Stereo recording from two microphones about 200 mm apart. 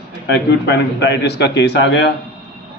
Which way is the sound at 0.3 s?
60° left (ahead or behind).